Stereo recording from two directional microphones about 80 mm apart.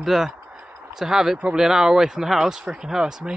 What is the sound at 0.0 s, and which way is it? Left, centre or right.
Speech, centre.